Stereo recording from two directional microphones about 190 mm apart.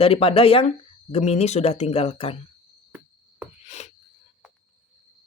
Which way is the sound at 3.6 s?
35° left (ahead or behind).